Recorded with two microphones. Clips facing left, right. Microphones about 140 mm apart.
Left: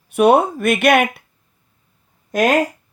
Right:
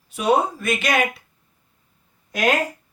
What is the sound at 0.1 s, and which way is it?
Speech, 60° left (ahead or behind).